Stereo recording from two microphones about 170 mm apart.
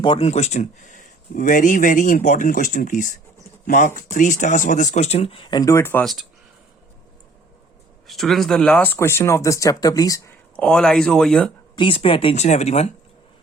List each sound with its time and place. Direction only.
0.0 s speech: 35° left (ahead or behind); by 6.1 s 15° left (ahead or behind)
8.0 s speech: centre (ahead or behind); by 10.3 s 20° left (ahead or behind)
10.6 s speech: 5° left (ahead or behind)
11.8 s speech: 30° left (ahead or behind)